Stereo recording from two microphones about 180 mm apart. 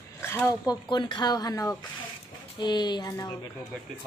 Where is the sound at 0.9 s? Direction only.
25° left (ahead or behind).